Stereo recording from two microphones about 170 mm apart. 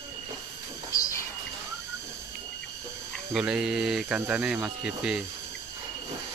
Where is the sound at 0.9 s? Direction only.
20° left (ahead or behind).